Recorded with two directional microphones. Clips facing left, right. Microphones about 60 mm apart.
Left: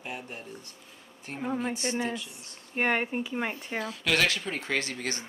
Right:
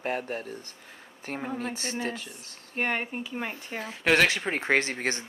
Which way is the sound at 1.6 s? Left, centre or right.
Left.